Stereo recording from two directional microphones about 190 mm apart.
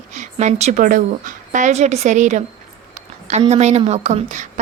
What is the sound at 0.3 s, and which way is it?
A woman's voice, 35° right (ahead or behind).